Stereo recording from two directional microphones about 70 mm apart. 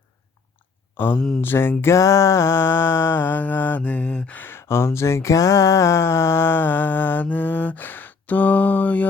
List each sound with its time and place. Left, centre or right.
0.9 s speech: left
1.4 s mantra: left
1.8 s mantra: left